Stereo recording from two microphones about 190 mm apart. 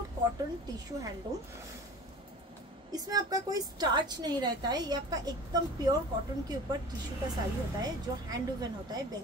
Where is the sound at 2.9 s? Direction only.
20° right (ahead or behind).